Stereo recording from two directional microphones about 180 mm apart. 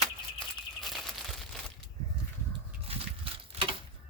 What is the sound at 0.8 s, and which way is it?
Crumpling, centre (ahead or behind).